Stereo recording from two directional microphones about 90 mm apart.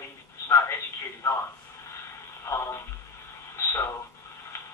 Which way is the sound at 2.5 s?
30° left (ahead or behind).